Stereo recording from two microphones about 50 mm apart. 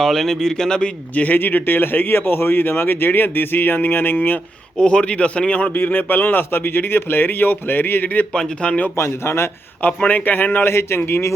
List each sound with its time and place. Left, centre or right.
0.0 s speech: centre
1.1 s speech: left
1.4 s speech: left
4.8 s speech: left
5.7 s speech: left
8.3 s speech: centre
9.0 s a man's voice: left
9.8 s speech: left
10.7 s a man's voice: left